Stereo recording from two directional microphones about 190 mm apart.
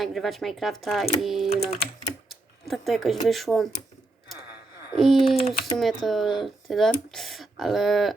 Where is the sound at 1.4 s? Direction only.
30° left (ahead or behind).